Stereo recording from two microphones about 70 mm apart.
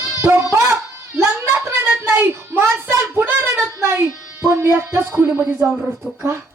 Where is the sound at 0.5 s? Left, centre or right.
Right.